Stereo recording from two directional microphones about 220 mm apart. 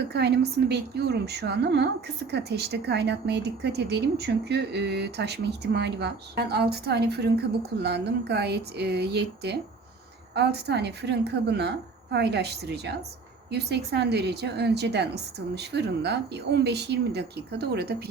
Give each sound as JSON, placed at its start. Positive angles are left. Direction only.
{"t": 0.1, "sound": "speech", "side_deg": -50}